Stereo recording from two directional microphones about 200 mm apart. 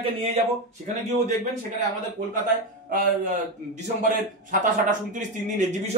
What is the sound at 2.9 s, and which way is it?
Speech, 40° right (ahead or behind).